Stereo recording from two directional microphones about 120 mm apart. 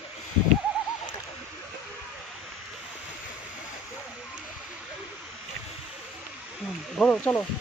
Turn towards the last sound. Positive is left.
turn(degrees=10)  # may be behind; listen again after turning